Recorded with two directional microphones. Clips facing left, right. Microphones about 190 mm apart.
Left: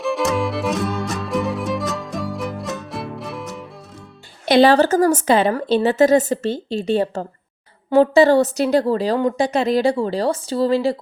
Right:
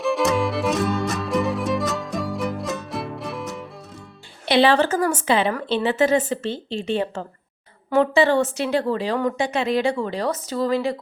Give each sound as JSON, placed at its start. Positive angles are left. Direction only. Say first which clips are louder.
{"t": 0.0, "sound": "music", "louder": "even", "side_deg": 0}
{"t": 4.4, "sound": "a woman's voice", "louder": "left 4 dB", "side_deg": 40}